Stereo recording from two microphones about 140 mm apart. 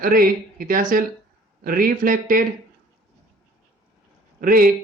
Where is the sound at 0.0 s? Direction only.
90° right.